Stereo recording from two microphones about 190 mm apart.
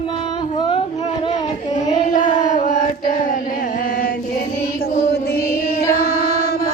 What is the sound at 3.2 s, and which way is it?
Chant, 45° left (ahead or behind).